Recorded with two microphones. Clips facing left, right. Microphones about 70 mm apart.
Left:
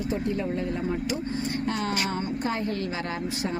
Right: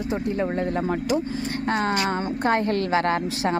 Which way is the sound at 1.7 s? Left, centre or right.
Right.